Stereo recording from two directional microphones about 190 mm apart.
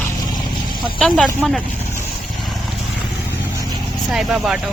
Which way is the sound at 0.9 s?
5° left (ahead or behind).